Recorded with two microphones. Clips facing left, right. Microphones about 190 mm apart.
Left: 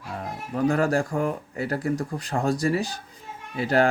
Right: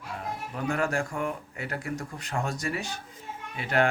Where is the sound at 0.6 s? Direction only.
35° left (ahead or behind).